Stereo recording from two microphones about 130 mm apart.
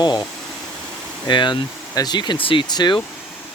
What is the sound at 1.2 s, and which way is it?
Speech, 35° left (ahead or behind).